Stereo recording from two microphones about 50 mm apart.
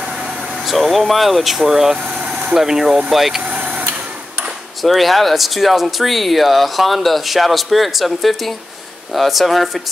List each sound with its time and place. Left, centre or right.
0.0 s vehicle: centre
0.7 s speech: centre
2.1 s vehicle: centre
2.5 s speech: centre
3.4 s vehicle: right
4.8 s speech: centre